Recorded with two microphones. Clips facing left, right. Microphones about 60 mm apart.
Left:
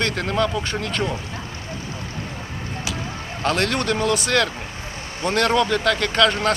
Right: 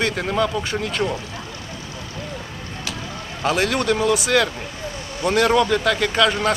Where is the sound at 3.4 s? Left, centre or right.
Centre.